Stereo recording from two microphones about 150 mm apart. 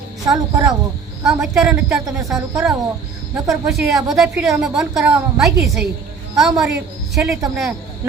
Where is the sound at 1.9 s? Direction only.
20° right (ahead or behind).